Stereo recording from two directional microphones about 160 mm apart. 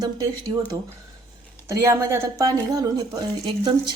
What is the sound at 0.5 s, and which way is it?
Speech, 25° right (ahead or behind).